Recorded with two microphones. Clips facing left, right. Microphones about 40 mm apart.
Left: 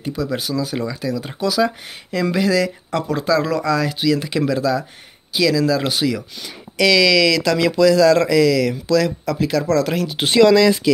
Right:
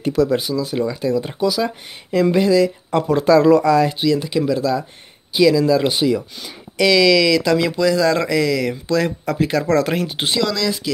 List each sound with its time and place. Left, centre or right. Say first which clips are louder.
0.0 s speech: right 7 dB; right
0.4 s speech: right 2 dB; centre
0.8 s speech: right 4 dB; centre
1.2 s speech: left 1 dB; centre
2.1 s speech: right 3 dB; centre
3.0 s speech: right 5 dB; right
4.0 s speech: right 1 dB; centre
5.3 s speech: right 3 dB; centre
9.0 s speech: even; right
10.5 s speech: left 8 dB; left